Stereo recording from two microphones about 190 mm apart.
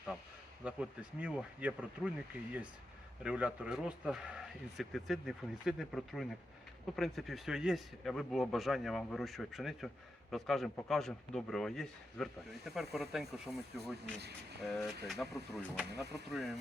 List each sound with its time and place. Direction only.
0.6 s speech: 5° right (ahead or behind)
14.6 s speech: centre (ahead or behind)
15.9 s speech: 60° right (ahead or behind)
16.3 s speech: centre (ahead or behind)